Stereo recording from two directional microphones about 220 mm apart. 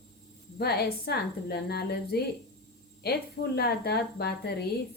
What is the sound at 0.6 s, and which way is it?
Speech, 45° left (ahead or behind).